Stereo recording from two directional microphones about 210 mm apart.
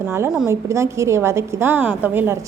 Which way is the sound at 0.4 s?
15° right (ahead or behind).